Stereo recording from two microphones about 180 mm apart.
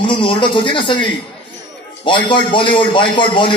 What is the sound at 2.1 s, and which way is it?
Music, 25° left (ahead or behind).